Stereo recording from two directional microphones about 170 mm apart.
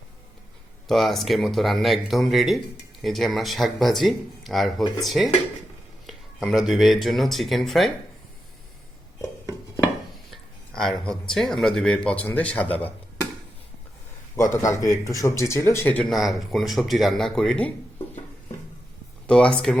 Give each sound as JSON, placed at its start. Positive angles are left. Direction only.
{"t": 0.9, "sound": "speech", "side_deg": 0}
{"t": 10.3, "sound": "speech", "side_deg": 0}
{"t": 14.3, "sound": "a man's voice", "side_deg": 20}
{"t": 19.3, "sound": "speech", "side_deg": 5}